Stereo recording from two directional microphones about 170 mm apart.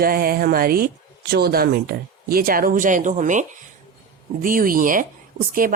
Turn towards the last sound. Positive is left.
turn(degrees=-55)  # may be behind; listen again after turning